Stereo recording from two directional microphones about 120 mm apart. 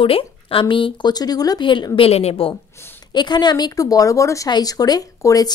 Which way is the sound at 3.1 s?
35° left (ahead or behind).